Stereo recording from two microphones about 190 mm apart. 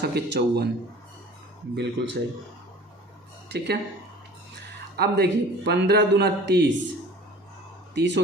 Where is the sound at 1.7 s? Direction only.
65° right (ahead or behind).